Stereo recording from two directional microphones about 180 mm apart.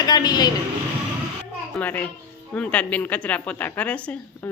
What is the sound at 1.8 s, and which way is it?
A woman's voice, 10° left (ahead or behind).